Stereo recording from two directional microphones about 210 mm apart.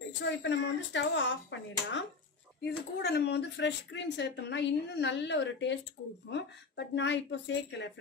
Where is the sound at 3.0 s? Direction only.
50° left (ahead or behind).